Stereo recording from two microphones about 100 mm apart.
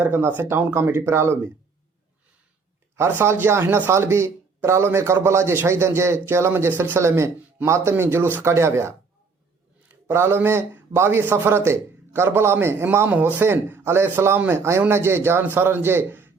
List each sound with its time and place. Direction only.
0.0 s a man's voice: 25° right (ahead or behind)
2.9 s a man's voice: 25° right (ahead or behind)